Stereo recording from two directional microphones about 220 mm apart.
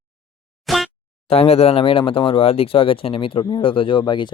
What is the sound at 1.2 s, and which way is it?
Speech, 25° left (ahead or behind).